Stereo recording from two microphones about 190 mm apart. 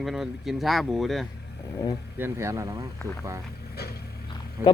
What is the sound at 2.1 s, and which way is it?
Speech, 10° right (ahead or behind).